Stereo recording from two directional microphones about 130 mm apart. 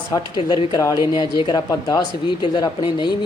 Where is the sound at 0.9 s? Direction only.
25° right (ahead or behind).